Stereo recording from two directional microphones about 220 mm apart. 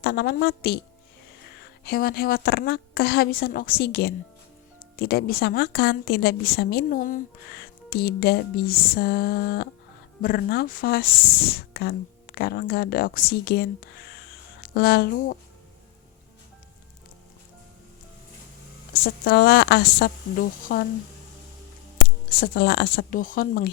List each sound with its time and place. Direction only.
0.0 s a woman's voice: 45° left (ahead or behind)
19.0 s a woman's voice: 45° left (ahead or behind)
21.9 s speech: 45° left (ahead or behind)